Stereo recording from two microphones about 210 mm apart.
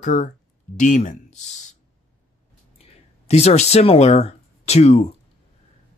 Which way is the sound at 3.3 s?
30° left (ahead or behind).